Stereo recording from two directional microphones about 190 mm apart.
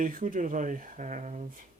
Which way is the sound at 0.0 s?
45° right (ahead or behind).